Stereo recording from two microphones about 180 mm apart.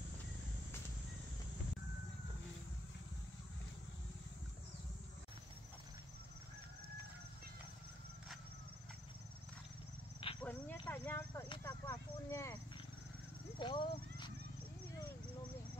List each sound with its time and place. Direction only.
10.2 s cricket: 30° left (ahead or behind)
10.9 s a sound: 10° left (ahead or behind)
13.6 s horse: 25° left (ahead or behind)